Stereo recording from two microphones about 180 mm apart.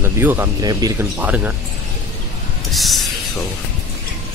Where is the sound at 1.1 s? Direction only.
10° right (ahead or behind).